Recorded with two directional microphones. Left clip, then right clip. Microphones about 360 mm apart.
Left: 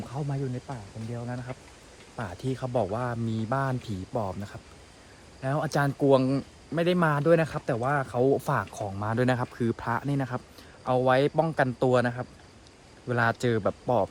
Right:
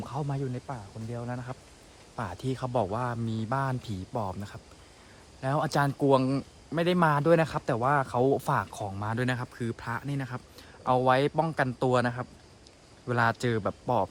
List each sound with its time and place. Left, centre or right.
0.1 s speech: centre
10.8 s speech: centre